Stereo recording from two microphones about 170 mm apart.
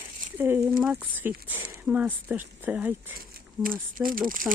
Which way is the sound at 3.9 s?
55° right (ahead or behind).